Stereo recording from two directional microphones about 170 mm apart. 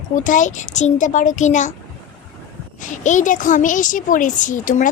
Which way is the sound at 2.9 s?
45° left (ahead or behind).